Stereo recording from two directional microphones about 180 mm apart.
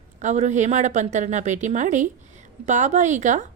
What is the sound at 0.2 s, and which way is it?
A woman's voice, 40° right (ahead or behind).